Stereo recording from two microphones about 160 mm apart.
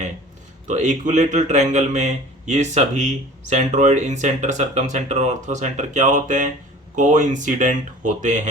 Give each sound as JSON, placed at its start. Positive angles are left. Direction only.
{"t": 0.7, "sound": "a man's voice", "side_deg": -50}